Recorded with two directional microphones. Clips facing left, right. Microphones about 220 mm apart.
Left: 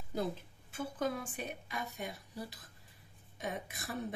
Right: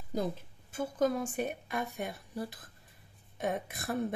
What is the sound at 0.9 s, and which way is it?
A woman's voice, 45° right (ahead or behind).